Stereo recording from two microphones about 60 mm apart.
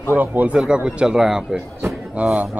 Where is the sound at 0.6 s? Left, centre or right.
Centre.